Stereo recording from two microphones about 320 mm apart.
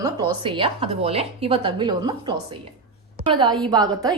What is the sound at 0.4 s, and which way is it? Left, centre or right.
A woman's voice, centre.